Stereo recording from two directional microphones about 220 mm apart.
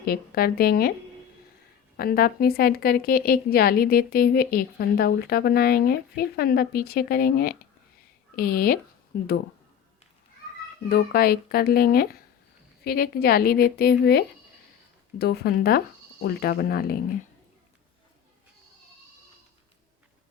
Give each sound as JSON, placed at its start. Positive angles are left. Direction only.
{"t": 0.0, "sound": "a woman's voice", "side_deg": 45}
{"t": 2.0, "sound": "a woman's voice", "side_deg": 45}
{"t": 10.8, "sound": "a woman's voice", "side_deg": 45}